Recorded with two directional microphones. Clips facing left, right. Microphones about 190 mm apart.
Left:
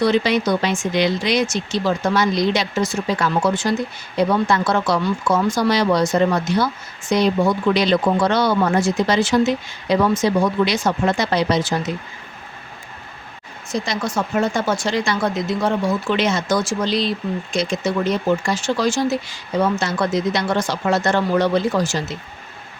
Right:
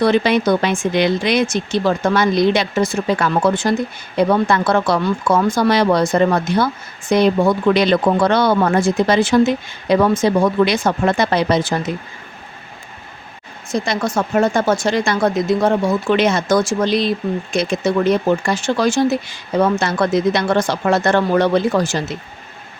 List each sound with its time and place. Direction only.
0.0 s speech: 55° right (ahead or behind)
13.7 s speech: 55° right (ahead or behind)